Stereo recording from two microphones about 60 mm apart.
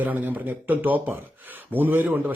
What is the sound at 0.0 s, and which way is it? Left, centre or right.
Speech, right.